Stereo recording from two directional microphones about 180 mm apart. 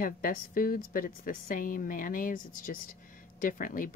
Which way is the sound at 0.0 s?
50° left (ahead or behind).